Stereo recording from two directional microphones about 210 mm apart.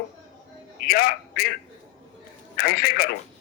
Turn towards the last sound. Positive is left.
turn(degrees=45)  # may be behind; listen again after turning